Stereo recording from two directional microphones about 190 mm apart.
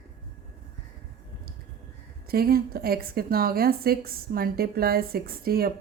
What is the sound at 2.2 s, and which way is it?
A woman's voice, 50° right (ahead or behind).